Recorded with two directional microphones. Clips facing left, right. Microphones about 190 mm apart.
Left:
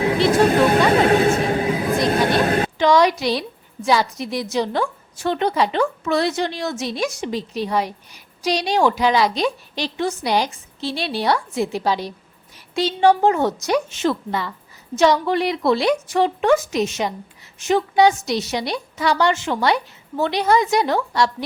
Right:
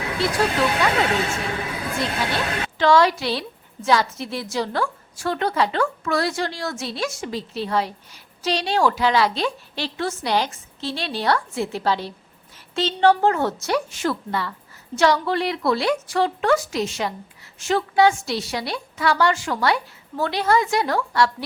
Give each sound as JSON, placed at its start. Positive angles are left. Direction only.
{"t": 0.4, "sound": "speech", "side_deg": 50}
{"t": 2.1, "sound": "speech", "side_deg": 50}
{"t": 2.7, "sound": "a woman's voice", "side_deg": 15}